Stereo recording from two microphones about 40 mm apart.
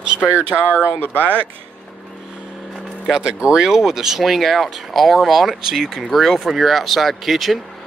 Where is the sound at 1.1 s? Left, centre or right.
Right.